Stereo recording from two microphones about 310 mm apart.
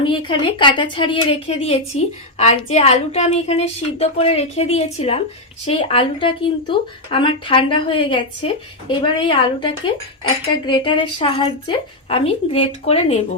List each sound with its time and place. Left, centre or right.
0.0 s a woman's voice: centre